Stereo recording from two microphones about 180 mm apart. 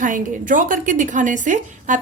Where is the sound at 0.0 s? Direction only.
45° right (ahead or behind).